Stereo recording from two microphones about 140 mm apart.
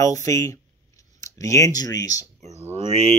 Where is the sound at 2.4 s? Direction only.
50° right (ahead or behind).